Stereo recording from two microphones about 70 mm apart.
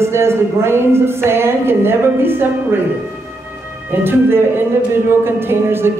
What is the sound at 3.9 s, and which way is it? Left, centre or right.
Speech, right.